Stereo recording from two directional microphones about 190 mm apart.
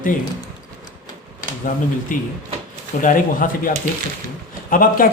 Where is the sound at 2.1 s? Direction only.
45° left (ahead or behind).